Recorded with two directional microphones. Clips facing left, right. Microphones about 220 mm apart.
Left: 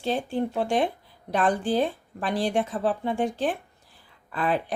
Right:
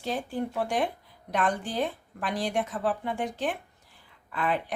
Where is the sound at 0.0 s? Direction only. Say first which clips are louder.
Left 4 dB; 25° left (ahead or behind).